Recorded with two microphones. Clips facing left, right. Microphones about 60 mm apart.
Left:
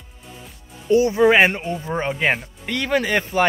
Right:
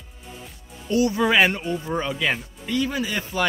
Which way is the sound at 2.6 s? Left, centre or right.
Left.